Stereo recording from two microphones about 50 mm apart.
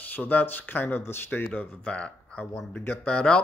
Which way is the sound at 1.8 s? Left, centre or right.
Left.